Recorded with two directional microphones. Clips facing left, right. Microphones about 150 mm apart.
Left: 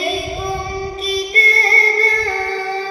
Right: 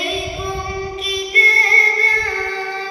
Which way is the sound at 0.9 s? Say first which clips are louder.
Left 2 dB; 40° left (ahead or behind).